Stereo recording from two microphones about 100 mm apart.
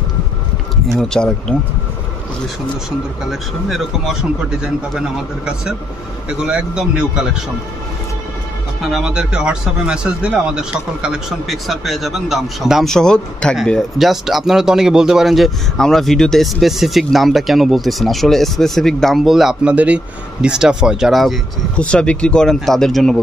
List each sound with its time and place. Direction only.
0.9 s speech: 5° left (ahead or behind)
3.3 s speech: centre (ahead or behind)
8.8 s speech: 5° right (ahead or behind)
21.7 s speech: 10° left (ahead or behind)